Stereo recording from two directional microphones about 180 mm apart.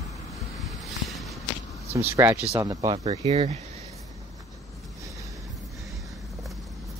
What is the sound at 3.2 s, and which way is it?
Speech, 35° right (ahead or behind).